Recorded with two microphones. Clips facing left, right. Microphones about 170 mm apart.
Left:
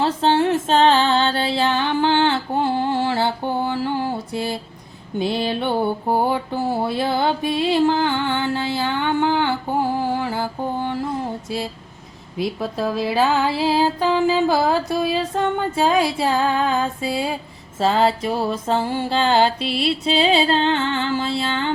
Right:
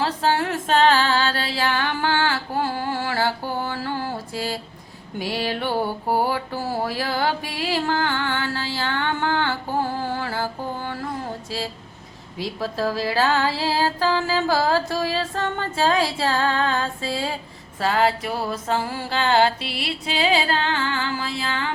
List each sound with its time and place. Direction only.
0.0 s female singing: 25° left (ahead or behind)
5.2 s mantra: 20° left (ahead or behind)
12.4 s speech: 20° left (ahead or behind)
17.7 s mantra: 25° left (ahead or behind)